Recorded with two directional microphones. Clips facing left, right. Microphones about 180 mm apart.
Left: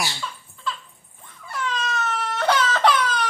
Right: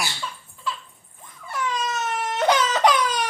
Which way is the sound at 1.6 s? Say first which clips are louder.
Even; 15° right (ahead or behind).